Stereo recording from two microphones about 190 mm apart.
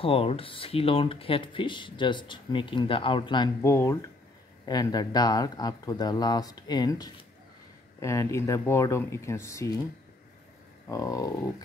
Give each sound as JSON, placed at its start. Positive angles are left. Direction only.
{"t": 0.0, "sound": "speech", "side_deg": 30}
{"t": 10.9, "sound": "speech", "side_deg": 15}